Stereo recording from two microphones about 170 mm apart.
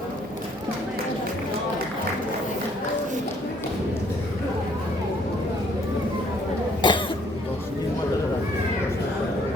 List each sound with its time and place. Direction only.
6.8 s cough: 25° left (ahead or behind)